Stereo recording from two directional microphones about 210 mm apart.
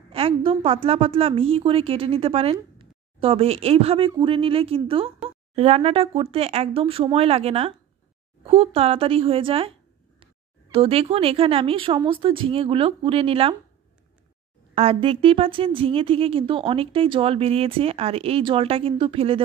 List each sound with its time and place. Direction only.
0.1 s a woman's voice: 25° right (ahead or behind)
14.8 s a woman's voice: 25° right (ahead or behind)